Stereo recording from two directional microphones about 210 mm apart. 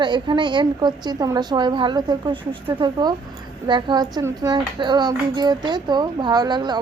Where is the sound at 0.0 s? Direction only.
20° right (ahead or behind).